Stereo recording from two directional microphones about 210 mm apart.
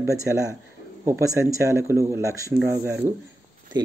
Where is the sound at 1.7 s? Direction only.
15° right (ahead or behind).